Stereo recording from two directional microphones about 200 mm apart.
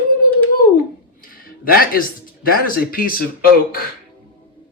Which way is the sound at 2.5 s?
50° left (ahead or behind).